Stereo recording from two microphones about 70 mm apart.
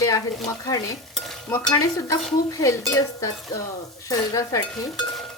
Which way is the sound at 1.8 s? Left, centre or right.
Left.